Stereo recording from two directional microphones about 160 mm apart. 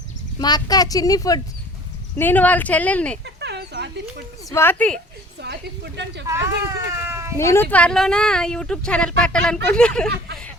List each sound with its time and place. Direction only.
0.3 s speech: 25° left (ahead or behind)
2.1 s speech: 10° left (ahead or behind)
3.2 s a sound: 90° right
4.4 s a woman's voice: 15° left (ahead or behind)
5.4 s speech: 90° right
6.2 s speech: 20° right (ahead or behind)
7.3 s speech: 15° left (ahead or behind)